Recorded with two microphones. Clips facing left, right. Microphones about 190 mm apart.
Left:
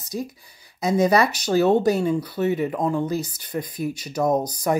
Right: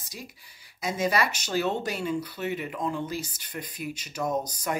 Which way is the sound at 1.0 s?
40° left (ahead or behind).